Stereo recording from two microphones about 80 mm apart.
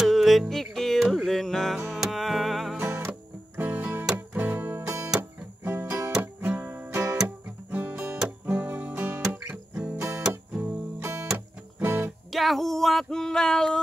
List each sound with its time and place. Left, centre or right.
0.0 s music: centre
2.8 s music: right
9.9 s music: right
11.3 s music: right
12.3 s a sound: centre